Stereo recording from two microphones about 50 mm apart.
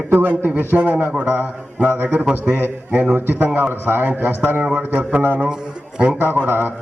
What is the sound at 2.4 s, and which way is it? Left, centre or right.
Speech, left.